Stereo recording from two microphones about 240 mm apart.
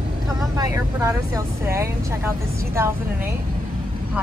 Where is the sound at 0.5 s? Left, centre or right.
Centre.